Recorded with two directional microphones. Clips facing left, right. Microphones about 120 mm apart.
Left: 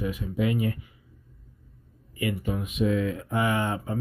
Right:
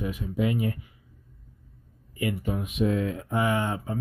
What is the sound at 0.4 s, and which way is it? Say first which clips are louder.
Speech: even; 30° right (ahead or behind).